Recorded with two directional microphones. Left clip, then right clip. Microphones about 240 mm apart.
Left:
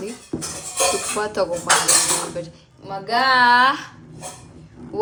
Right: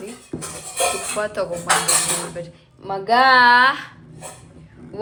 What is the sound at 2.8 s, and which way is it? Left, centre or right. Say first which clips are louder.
Dishes: right 4 dB; centre.